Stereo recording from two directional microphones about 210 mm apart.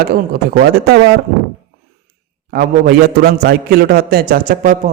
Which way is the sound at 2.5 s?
45° right (ahead or behind).